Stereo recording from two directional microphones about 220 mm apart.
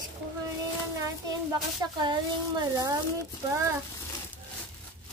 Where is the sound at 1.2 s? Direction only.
20° right (ahead or behind).